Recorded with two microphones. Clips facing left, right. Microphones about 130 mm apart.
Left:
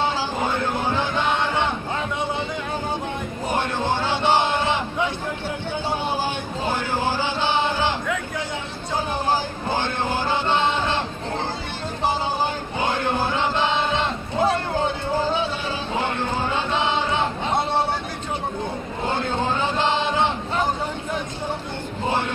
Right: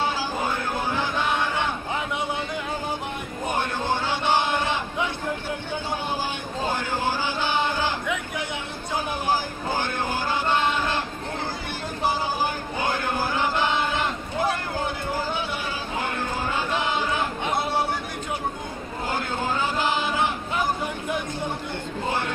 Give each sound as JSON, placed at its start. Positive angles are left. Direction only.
{"t": 1.1, "sound": "music", "side_deg": 20}
{"t": 3.5, "sound": "music", "side_deg": 15}
{"t": 6.6, "sound": "speech", "side_deg": 15}
{"t": 7.6, "sound": "a sound", "side_deg": 20}
{"t": 9.8, "sound": "music", "side_deg": 20}
{"t": 12.8, "sound": "chant", "side_deg": 20}
{"t": 16.0, "sound": "music", "side_deg": 20}
{"t": 19.0, "sound": "a sound", "side_deg": 25}